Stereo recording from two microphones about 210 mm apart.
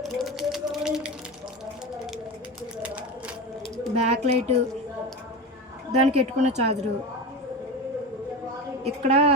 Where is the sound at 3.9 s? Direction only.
30° right (ahead or behind).